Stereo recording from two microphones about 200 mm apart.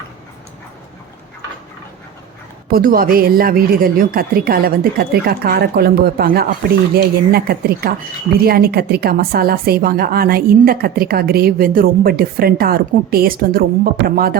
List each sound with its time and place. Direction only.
2.6 s a woman's voice: 45° right (ahead or behind)